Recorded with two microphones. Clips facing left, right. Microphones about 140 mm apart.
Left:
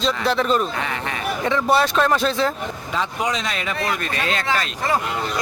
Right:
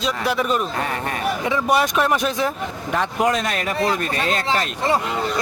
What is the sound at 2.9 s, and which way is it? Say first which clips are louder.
Speech: right 4 dB; 55° right (ahead or behind).